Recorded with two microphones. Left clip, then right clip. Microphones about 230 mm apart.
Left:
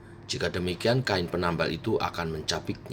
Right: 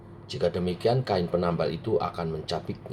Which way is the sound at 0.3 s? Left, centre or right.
Left.